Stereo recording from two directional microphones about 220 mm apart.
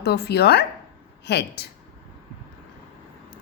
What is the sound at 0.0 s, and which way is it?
Speech, 50° left (ahead or behind).